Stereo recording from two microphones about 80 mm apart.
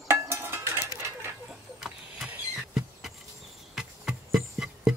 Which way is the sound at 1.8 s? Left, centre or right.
Centre.